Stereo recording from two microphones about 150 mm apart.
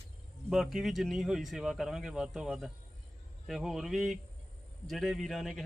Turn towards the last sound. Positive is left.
turn(degrees=0)  # may be behind; listen again after turning